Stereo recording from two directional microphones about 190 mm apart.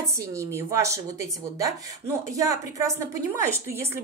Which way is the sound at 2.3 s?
15° right (ahead or behind).